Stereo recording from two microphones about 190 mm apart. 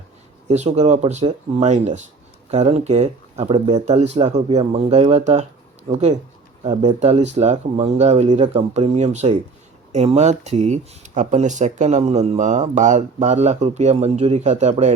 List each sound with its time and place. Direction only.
0.4 s speech: 35° right (ahead or behind)